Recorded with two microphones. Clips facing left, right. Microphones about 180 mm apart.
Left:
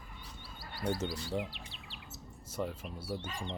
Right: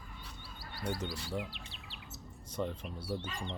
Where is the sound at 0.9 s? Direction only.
30° left (ahead or behind).